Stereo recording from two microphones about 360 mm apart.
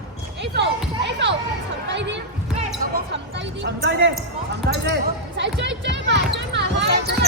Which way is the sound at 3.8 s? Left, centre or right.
Right.